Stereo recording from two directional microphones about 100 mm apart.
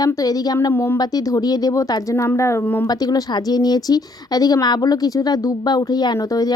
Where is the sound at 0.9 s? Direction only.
40° left (ahead or behind).